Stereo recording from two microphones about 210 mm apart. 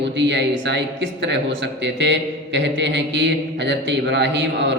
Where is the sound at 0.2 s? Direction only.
55° right (ahead or behind).